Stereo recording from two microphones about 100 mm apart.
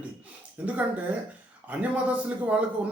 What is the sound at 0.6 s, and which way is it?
Speech, 15° right (ahead or behind).